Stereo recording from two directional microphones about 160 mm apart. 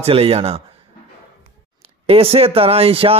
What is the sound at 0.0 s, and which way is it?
Speech, 35° right (ahead or behind).